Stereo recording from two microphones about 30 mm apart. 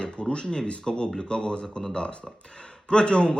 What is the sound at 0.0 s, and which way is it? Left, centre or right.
Speech, left.